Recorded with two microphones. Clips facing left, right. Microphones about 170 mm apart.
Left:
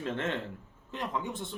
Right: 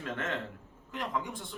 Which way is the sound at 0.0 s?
30° left (ahead or behind).